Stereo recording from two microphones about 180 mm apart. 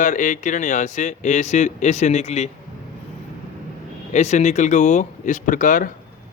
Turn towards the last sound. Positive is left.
turn(degrees=45)  # may be behind; listen again after turning